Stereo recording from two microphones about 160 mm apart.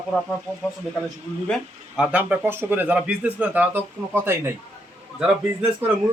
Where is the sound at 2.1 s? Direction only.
10° right (ahead or behind).